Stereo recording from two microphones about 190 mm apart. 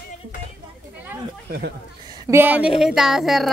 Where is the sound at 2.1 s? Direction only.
20° right (ahead or behind); by 3.5 s centre (ahead or behind).